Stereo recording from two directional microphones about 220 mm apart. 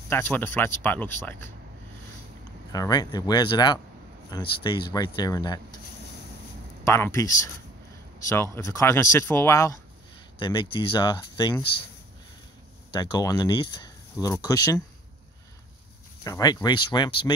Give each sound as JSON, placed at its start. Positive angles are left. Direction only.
{"t": 0.1, "sound": "speech", "side_deg": 10}
{"t": 2.7, "sound": "speech", "side_deg": 15}
{"t": 6.8, "sound": "speech", "side_deg": 10}
{"t": 8.5, "sound": "speech", "side_deg": 15}
{"t": 12.9, "sound": "speech", "side_deg": 20}
{"t": 16.3, "sound": "speech", "side_deg": 15}